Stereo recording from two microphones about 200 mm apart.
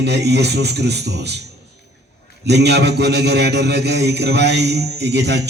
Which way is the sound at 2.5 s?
55° right (ahead or behind).